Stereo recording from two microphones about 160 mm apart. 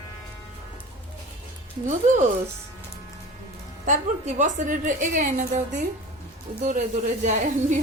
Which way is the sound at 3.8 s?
50° right (ahead or behind).